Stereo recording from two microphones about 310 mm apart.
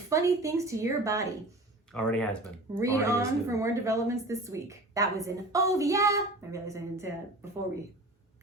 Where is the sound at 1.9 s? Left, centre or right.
Centre.